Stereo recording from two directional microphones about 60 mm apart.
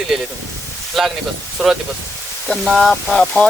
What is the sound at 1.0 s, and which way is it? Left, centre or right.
Speech, centre.